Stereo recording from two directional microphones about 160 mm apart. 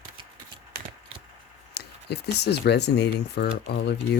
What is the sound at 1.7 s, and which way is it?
Speech, 90° left.